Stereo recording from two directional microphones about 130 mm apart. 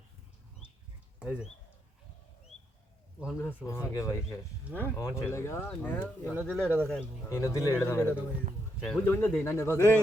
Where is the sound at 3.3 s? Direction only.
20° left (ahead or behind).